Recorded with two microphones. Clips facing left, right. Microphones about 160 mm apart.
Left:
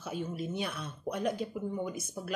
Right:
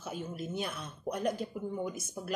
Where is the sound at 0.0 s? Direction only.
Centre (ahead or behind).